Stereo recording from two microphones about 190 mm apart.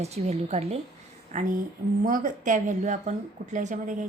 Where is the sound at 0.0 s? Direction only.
35° right (ahead or behind).